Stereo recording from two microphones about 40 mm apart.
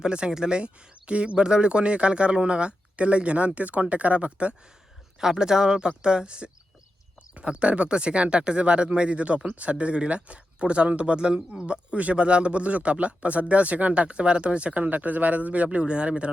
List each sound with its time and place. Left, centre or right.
0.0 s speech: right
5.2 s speech: centre